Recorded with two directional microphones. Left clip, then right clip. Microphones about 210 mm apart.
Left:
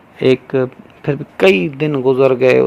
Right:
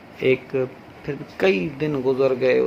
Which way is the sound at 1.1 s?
40° left (ahead or behind).